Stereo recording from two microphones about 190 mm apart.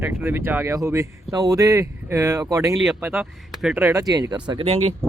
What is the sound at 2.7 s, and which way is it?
Speech, centre (ahead or behind).